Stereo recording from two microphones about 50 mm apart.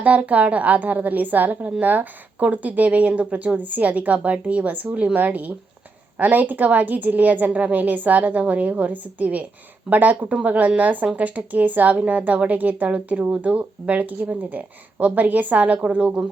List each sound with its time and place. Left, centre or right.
0.0 s a woman's voice: right